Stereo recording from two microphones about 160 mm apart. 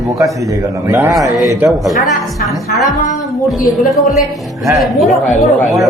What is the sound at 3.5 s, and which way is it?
Speech, centre (ahead or behind).